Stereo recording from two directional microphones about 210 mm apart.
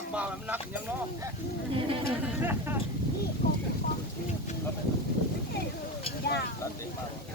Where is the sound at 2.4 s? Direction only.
10° right (ahead or behind).